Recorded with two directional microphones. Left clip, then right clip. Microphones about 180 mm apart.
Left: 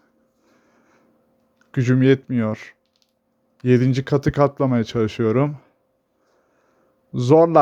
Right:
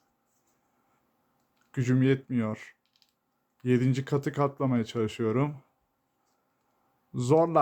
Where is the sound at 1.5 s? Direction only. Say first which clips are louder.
Left 8 dB; 30° left (ahead or behind).